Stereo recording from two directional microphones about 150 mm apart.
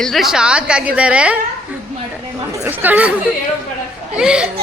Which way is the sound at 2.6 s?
10° right (ahead or behind).